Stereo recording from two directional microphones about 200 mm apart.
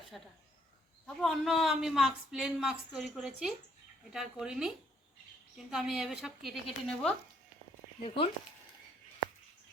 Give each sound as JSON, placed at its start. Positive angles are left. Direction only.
{"t": 0.1, "sound": "a woman's voice", "side_deg": 0}
{"t": 8.0, "sound": "speech", "side_deg": 25}